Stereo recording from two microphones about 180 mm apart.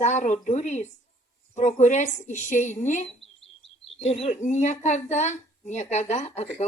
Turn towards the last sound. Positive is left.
turn(degrees=35)  # may be behind; listen again after turning